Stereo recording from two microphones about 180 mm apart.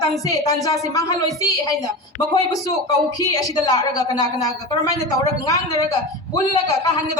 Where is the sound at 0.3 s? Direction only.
20° left (ahead or behind).